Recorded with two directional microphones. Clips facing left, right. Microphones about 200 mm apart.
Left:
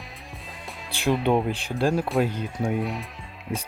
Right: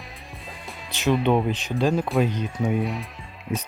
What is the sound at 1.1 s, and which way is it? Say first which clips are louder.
Speech: right 1 dB; centre (ahead or behind).